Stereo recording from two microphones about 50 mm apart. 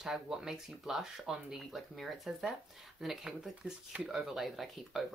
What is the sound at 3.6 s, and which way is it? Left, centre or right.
Speech, right.